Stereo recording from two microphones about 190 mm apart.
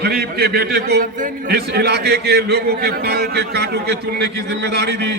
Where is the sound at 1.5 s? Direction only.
55° right (ahead or behind).